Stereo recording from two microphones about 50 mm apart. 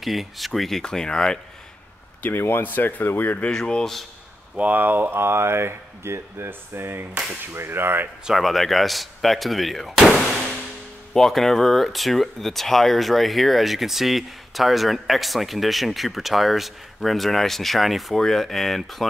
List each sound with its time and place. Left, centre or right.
0.0 s speech: centre
2.6 s speech: left
3.5 s speech: centre
4.6 s speech: right
5.1 s speech: right
8.3 s speech: centre